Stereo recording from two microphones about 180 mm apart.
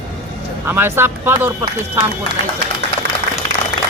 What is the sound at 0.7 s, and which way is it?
Speech, 10° right (ahead or behind).